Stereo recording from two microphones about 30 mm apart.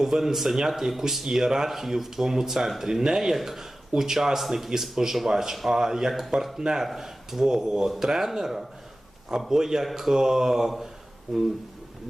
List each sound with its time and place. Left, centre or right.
0.0 s speech: centre